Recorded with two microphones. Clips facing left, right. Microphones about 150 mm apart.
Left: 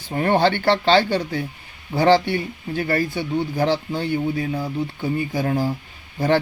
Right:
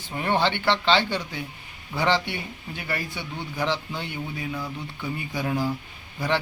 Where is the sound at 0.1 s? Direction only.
45° left (ahead or behind).